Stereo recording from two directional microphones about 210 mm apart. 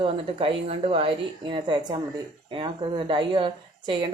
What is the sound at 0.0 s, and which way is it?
A woman's voice, 25° right (ahead or behind).